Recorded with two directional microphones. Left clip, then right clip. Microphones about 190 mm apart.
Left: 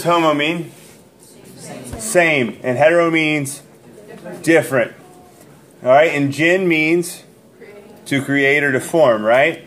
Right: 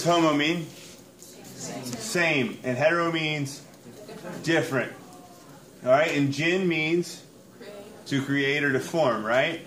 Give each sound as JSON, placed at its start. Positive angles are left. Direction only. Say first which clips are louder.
{"t": 0.0, "sound": "speech", "louder": "left 7 dB", "side_deg": 15}
{"t": 2.0, "sound": "speech", "louder": "left 10 dB", "side_deg": 30}
{"t": 4.8, "sound": "speech", "louder": "left 11 dB", "side_deg": 35}
{"t": 8.1, "sound": "speech", "louder": "left 10 dB", "side_deg": 35}